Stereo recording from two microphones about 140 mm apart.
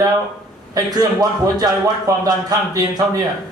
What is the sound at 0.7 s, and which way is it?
Speech, 25° right (ahead or behind).